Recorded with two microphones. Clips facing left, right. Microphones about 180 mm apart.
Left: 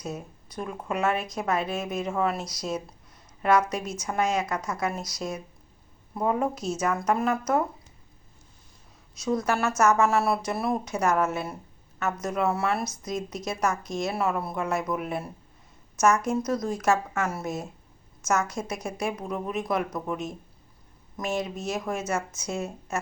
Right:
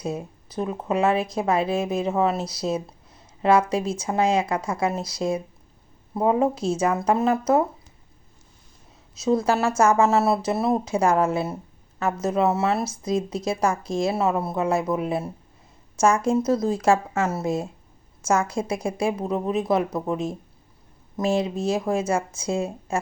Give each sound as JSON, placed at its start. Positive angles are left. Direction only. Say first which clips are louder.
{"t": 0.0, "sound": "speech", "louder": "right 6 dB", "side_deg": -30}
{"t": 9.1, "sound": "speech", "louder": "right 5 dB", "side_deg": -25}